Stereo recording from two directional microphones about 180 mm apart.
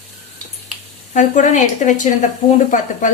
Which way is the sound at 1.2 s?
40° left (ahead or behind).